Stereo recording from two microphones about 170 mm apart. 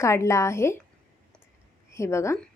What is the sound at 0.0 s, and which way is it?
Speech, 15° left (ahead or behind).